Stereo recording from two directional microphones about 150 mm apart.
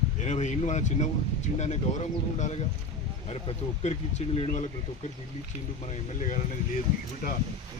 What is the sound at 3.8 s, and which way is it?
Speech, 50° left (ahead or behind).